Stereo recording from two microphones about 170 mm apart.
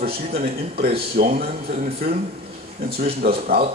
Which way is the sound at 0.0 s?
60° right (ahead or behind).